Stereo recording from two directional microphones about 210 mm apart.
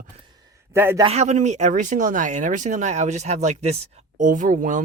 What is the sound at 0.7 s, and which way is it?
Speech, 10° right (ahead or behind).